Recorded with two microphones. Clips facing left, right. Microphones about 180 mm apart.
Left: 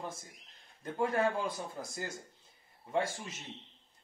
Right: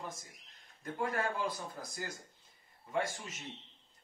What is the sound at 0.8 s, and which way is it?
Speech, 25° left (ahead or behind).